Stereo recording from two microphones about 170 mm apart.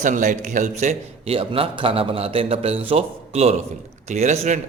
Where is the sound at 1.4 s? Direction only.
30° right (ahead or behind).